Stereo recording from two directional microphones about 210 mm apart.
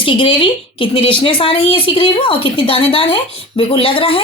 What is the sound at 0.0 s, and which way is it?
Speech, 25° left (ahead or behind).